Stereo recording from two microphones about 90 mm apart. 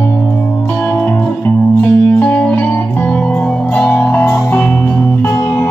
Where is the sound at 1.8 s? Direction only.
15° left (ahead or behind).